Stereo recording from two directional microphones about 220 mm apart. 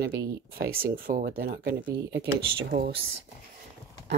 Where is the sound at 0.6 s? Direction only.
40° right (ahead or behind).